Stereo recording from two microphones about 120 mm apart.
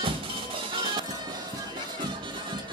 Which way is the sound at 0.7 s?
40° right (ahead or behind).